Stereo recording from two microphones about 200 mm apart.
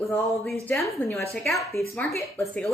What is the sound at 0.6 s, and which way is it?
Speech, 15° left (ahead or behind).